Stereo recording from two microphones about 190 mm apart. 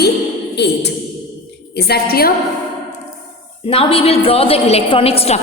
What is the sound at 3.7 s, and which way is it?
A woman's voice, 30° left (ahead or behind).